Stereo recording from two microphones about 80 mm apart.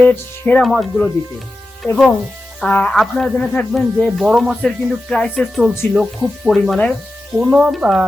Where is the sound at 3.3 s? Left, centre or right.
Centre.